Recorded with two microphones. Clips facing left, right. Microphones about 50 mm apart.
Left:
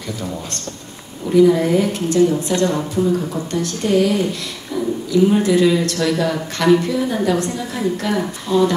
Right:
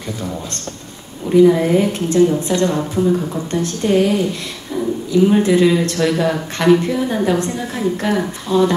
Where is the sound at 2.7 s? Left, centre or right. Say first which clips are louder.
Right 1 dB; centre.